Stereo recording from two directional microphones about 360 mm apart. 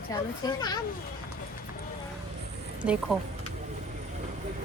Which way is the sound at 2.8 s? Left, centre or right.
Centre.